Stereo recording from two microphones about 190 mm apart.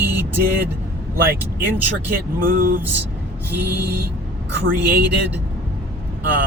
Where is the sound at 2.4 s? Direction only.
50° right (ahead or behind).